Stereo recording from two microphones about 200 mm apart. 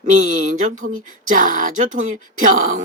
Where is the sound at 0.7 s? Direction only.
90° right.